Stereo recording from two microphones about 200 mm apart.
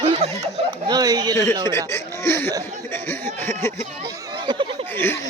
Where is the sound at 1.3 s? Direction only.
15° left (ahead or behind).